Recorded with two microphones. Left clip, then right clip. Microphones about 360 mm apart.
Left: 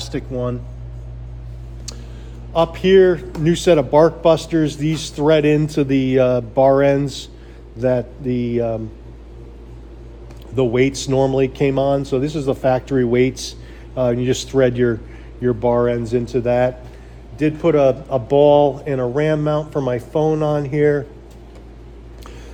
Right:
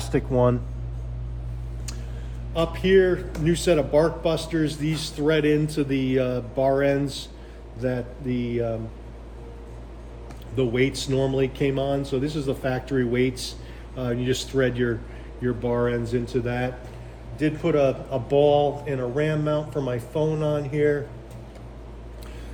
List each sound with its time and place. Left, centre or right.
0.1 s speech: centre
2.5 s a man's voice: centre
10.5 s a man's voice: centre